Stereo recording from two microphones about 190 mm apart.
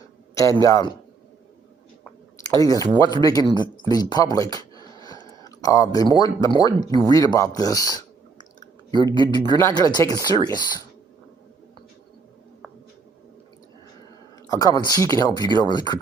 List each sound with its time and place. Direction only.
0.3 s a man's voice: 15° left (ahead or behind)
2.4 s speech: 20° left (ahead or behind)
14.4 s speech: 20° left (ahead or behind)